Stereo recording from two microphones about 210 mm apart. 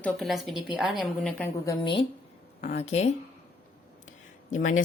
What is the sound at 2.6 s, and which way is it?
Speech, 30° left (ahead or behind).